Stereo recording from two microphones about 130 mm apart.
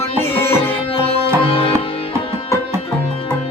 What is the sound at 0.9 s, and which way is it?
Music, 50° left (ahead or behind).